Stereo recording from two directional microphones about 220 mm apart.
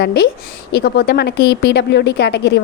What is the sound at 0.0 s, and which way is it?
A woman's voice, 45° left (ahead or behind).